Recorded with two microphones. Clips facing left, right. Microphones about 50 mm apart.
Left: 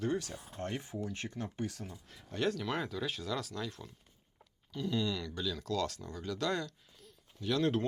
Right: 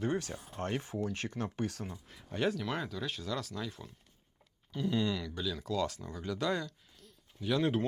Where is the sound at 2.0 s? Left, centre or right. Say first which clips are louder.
Right 1 dB; centre.